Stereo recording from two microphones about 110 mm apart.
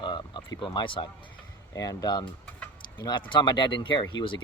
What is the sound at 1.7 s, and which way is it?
Speech, 35° left (ahead or behind).